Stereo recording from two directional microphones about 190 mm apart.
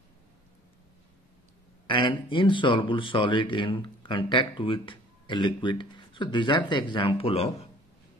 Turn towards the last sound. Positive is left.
turn(degrees=30)  # may be behind; listen again after turning